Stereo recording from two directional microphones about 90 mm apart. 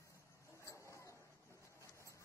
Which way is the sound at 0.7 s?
35° left (ahead or behind).